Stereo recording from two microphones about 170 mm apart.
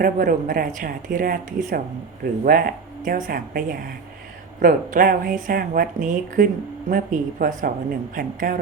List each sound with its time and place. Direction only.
0.0 s speech: 55° right (ahead or behind)